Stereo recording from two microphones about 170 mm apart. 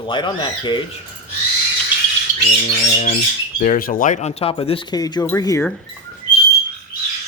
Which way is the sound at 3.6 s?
50° left (ahead or behind).